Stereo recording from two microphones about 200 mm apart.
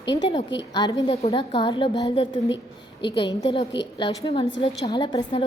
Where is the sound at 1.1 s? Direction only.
30° left (ahead or behind).